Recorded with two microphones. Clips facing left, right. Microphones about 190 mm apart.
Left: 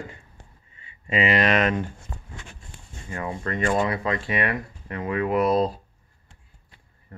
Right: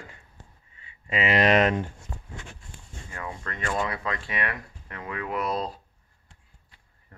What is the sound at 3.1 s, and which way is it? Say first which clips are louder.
Speech: left 8 dB; 20° left (ahead or behind).